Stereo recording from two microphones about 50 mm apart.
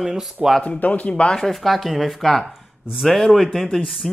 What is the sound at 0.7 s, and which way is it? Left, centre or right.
Speech, left.